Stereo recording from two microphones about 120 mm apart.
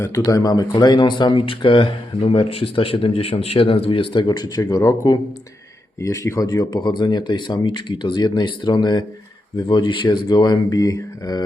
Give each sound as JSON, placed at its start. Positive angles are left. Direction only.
{"t": 0.0, "sound": "speech", "side_deg": 25}